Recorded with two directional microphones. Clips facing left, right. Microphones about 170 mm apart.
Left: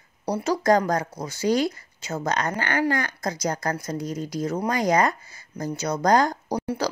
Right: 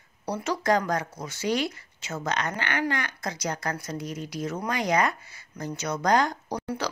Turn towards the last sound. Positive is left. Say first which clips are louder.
# left 4 dB
turn(degrees=30)  # may be behind; listen again after turning